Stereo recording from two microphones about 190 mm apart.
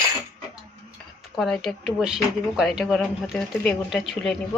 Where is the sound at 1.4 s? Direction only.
Centre (ahead or behind).